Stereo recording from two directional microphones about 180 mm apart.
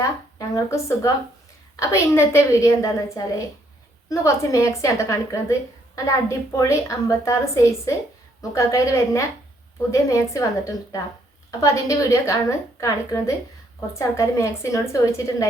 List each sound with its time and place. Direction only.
0.0 s a woman's voice: 20° left (ahead or behind)